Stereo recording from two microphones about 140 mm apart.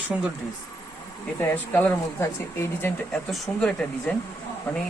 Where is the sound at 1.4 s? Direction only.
10° left (ahead or behind).